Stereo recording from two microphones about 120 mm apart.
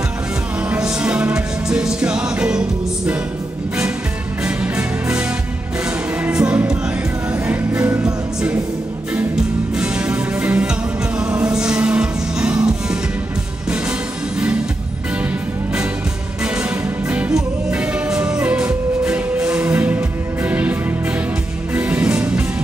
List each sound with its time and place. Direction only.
0.6 s music: 10° right (ahead or behind)
4.4 s music: 10° right (ahead or behind)
6.2 s music: 10° right (ahead or behind)
7.7 s music: 25° right (ahead or behind)
8.0 s music: 5° right (ahead or behind)
16.4 s music: 10° right (ahead or behind)